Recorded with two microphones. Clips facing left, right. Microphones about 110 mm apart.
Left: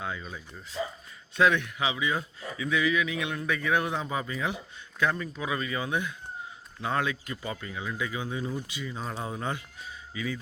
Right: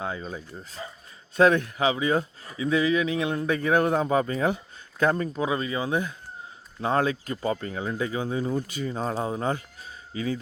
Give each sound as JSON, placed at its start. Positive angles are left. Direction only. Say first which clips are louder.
{"t": 0.0, "sound": "speech", "louder": "right 4 dB", "side_deg": -35}
{"t": 5.5, "sound": "speech", "louder": "even", "side_deg": -30}